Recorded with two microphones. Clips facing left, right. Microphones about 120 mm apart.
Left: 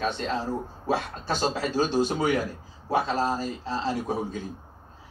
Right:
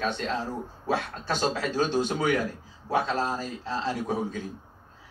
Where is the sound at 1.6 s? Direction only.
10° left (ahead or behind).